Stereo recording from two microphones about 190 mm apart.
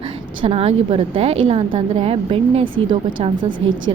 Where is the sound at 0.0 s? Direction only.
30° right (ahead or behind).